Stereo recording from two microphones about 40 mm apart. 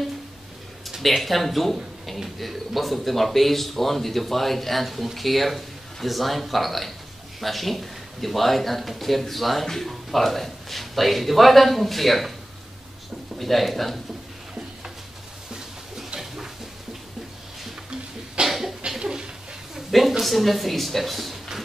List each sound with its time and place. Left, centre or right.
1.0 s speech: centre
13.4 s speech: centre
18.4 s cough: centre
18.9 s a sound: centre
19.9 s speech: centre